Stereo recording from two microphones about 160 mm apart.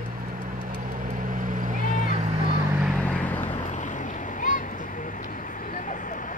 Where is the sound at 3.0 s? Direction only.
10° left (ahead or behind).